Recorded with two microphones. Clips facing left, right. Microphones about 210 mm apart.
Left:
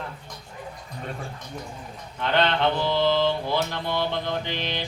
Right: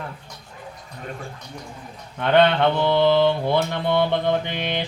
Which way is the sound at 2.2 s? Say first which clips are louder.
Right 6 dB; 55° right (ahead or behind).